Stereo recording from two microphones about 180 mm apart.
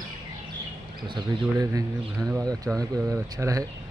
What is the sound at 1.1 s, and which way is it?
Speech, 20° right (ahead or behind).